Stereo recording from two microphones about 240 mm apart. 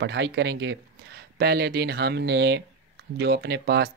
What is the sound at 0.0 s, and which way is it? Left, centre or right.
Speech, right.